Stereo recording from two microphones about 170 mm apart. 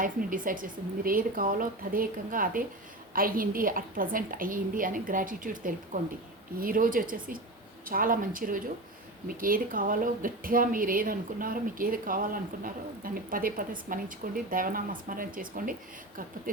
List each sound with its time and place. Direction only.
0.0 s a woman's voice: 55° right (ahead or behind)